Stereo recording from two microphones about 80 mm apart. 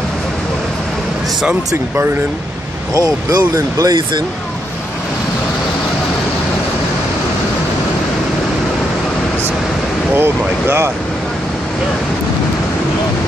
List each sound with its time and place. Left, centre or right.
2.9 s speech: right
10.1 s speech: right